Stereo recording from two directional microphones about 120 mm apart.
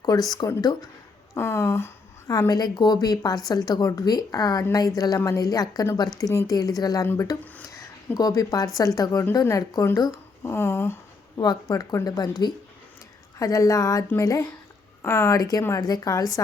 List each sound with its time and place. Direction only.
0.0 s a woman's voice: 35° left (ahead or behind)
1.3 s a woman's voice: 20° left (ahead or behind)
7.7 s a sound: 30° left (ahead or behind)
8.8 s speech: 30° left (ahead or behind)
11.3 s a woman's voice: 35° left (ahead or behind)
13.4 s speech: 30° left (ahead or behind)